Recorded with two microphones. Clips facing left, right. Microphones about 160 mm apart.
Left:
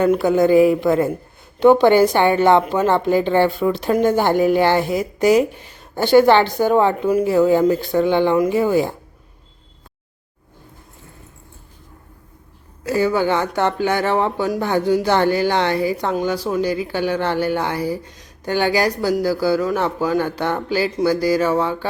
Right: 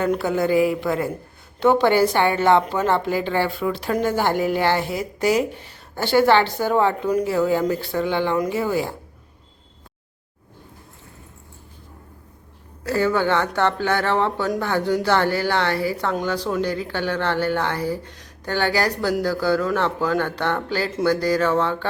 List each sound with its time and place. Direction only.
0.0 s a woman's voice: 15° left (ahead or behind)
12.8 s speech: 15° left (ahead or behind)